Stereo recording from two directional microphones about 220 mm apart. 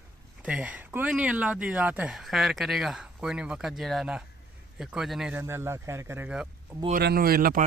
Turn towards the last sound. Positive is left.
turn(degrees=-40)  # may be behind; listen again after turning